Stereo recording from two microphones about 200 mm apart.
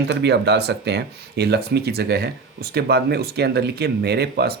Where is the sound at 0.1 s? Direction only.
55° right (ahead or behind).